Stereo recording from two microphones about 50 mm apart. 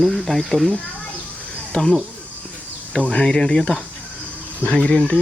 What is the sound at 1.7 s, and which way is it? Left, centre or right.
Speech, centre.